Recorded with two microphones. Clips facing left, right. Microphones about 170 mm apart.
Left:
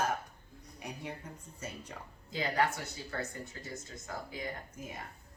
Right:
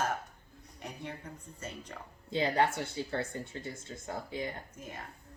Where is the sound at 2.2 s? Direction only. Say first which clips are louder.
Right 3 dB; 30° right (ahead or behind).